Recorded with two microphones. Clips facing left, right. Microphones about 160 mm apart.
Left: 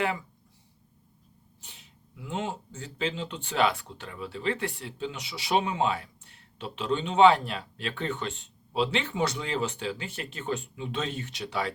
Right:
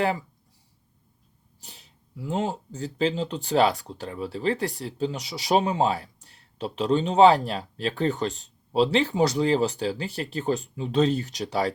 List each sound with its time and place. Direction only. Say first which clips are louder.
1.6 s speech: right 4 dB; 35° right (ahead or behind)